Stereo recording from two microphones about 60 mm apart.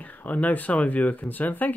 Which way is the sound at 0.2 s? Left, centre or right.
Left.